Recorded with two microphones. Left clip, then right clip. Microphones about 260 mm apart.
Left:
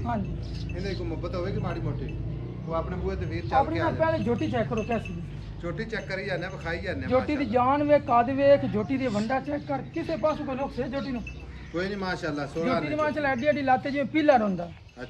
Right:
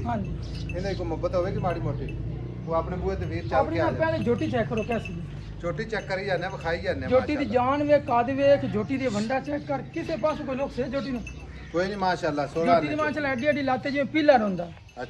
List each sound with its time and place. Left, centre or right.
1.2 s a man's voice: centre
4.0 s speech: left
5.6 s a man's voice: centre
7.1 s speech: left
11.7 s a man's voice: centre
12.8 s speech: left